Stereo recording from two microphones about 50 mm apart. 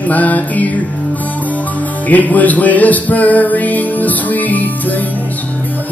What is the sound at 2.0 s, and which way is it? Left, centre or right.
Music, left.